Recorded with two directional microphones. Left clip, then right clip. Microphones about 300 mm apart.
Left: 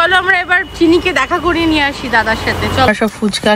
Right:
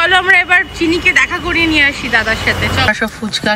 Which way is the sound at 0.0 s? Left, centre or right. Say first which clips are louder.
Right 1 dB; centre.